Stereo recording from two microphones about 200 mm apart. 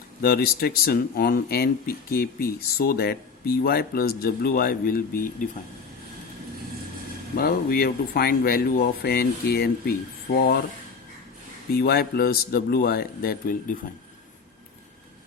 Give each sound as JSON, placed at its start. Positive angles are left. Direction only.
{"t": 0.2, "sound": "speech", "side_deg": 50}
{"t": 7.3, "sound": "speech", "side_deg": 50}
{"t": 11.7, "sound": "speech", "side_deg": 50}